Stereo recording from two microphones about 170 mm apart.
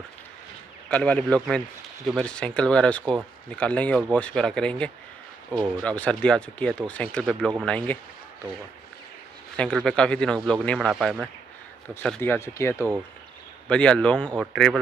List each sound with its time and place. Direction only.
0.8 s speech: 10° left (ahead or behind)
9.6 s speech: 5° left (ahead or behind)
11.9 s speech: 10° left (ahead or behind)